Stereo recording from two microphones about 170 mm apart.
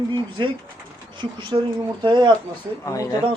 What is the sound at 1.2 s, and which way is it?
A man's voice, 30° right (ahead or behind).